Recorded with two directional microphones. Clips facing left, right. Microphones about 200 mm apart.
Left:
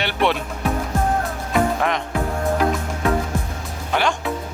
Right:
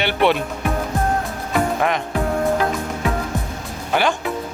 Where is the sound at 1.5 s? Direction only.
5° right (ahead or behind).